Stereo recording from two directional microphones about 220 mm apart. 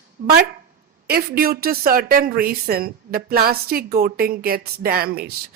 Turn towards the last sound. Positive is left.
turn(degrees=-45)  # may be behind; listen again after turning